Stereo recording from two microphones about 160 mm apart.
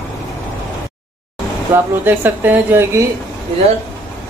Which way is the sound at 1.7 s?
10° right (ahead or behind).